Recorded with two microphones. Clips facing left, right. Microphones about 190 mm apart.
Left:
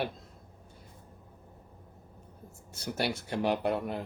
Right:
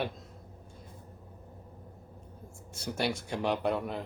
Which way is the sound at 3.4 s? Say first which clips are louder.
Left 1 dB; 10° left (ahead or behind).